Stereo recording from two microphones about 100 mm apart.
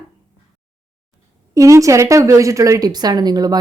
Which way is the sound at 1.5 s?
35° right (ahead or behind).